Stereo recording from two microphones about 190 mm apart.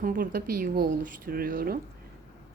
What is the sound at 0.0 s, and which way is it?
A woman's voice, 45° right (ahead or behind).